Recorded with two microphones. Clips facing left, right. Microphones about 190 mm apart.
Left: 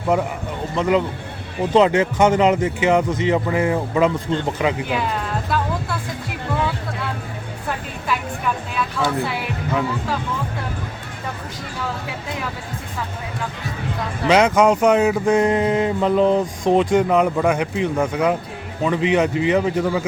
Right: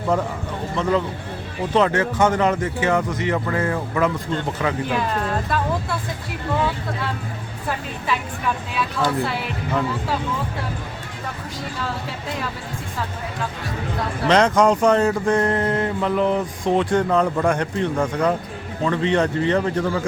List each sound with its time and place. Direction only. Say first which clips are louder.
0.1 s speech: left 2 dB; 10° left (ahead or behind)
5.5 s speech: left 3 dB; centre (ahead or behind)
9.0 s speech: right 1 dB; centre (ahead or behind)
14.3 s speech: left 1 dB; 10° left (ahead or behind)